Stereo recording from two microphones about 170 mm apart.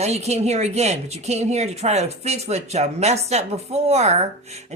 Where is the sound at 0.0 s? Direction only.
40° right (ahead or behind).